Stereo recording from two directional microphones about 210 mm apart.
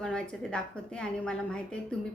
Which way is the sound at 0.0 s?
5° left (ahead or behind).